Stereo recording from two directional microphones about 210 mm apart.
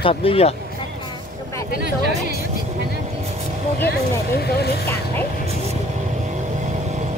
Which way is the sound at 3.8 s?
50° left (ahead or behind).